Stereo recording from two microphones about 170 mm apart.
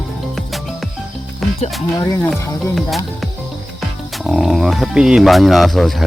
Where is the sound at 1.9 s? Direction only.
20° left (ahead or behind).